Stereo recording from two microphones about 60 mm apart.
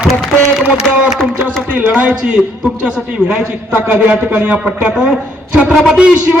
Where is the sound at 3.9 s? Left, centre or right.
Right.